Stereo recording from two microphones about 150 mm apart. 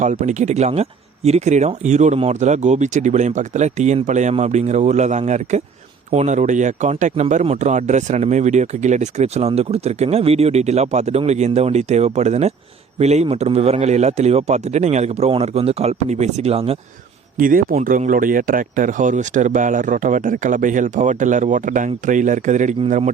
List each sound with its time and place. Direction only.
0.0 s speech: 50° right (ahead or behind)
17.3 s speech: 65° right (ahead or behind)